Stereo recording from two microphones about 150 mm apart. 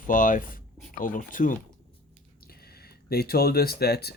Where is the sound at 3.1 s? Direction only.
90° left.